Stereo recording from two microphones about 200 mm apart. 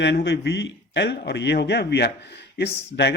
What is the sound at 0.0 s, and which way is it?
A man's voice, 60° left (ahead or behind).